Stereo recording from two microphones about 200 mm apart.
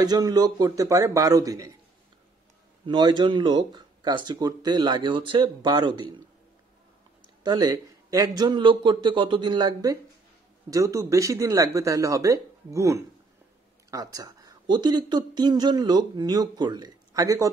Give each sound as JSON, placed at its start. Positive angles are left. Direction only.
{"t": 0.0, "sound": "speech", "side_deg": -20}
{"t": 2.9, "sound": "speech", "side_deg": -20}
{"t": 7.4, "sound": "speech", "side_deg": -20}